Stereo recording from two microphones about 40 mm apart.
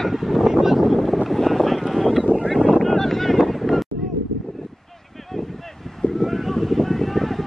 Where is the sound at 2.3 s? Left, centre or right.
Centre.